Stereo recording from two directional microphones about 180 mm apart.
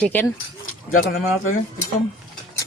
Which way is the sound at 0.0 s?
10° left (ahead or behind).